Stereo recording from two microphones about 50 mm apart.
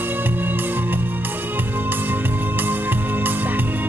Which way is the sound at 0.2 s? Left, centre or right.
Right.